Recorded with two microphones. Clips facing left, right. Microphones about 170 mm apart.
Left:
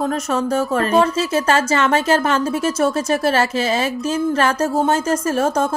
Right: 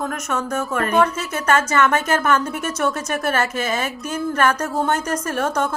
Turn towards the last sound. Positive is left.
turn(degrees=25)  # may be behind; listen again after turning